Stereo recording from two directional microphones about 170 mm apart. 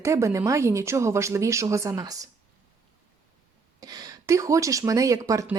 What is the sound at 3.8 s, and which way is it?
Speech, 20° right (ahead or behind).